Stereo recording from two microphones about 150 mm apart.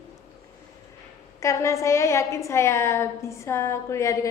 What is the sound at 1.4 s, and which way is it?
A woman's voice, 20° left (ahead or behind).